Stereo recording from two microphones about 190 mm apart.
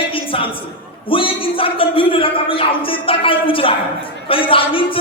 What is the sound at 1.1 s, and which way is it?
Speech, 30° left (ahead or behind).